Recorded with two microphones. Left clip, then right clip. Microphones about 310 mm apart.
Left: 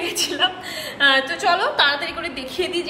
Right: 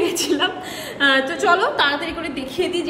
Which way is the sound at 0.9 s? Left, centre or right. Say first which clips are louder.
Even; centre.